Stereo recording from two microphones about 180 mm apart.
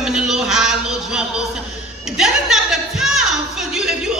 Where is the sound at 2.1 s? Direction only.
5° right (ahead or behind).